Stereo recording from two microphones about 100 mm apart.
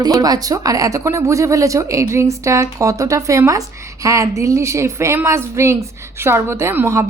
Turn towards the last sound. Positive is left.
turn(degrees=-30)  # may be behind; listen again after turning